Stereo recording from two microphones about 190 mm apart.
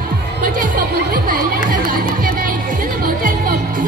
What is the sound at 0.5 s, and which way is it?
Music, 45° right (ahead or behind).